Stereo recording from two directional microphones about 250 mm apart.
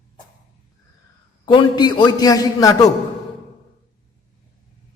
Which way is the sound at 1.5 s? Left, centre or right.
Centre.